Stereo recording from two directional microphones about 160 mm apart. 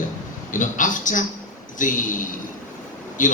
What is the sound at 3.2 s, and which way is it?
Speech, 55° left (ahead or behind).